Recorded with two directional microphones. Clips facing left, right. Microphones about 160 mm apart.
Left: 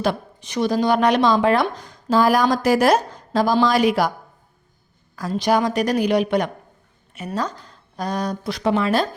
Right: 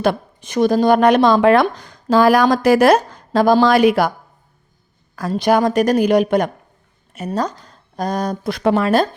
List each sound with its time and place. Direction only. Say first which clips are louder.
0.0 s speech: right 4 dB; 55° right (ahead or behind)
5.3 s speech: right 4 dB; 55° right (ahead or behind)